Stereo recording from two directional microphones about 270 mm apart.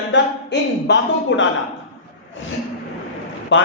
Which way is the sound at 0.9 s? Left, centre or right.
Left.